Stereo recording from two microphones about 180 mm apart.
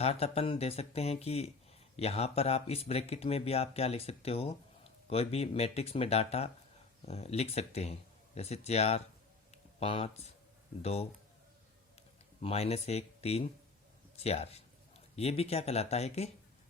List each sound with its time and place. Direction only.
0.0 s speech: 35° left (ahead or behind)
9.5 s a sound: 35° left (ahead or behind)
12.4 s speech: 35° left (ahead or behind)